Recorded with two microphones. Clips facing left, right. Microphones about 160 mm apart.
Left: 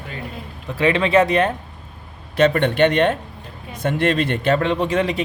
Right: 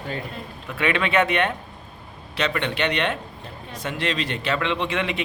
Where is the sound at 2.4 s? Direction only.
50° left (ahead or behind).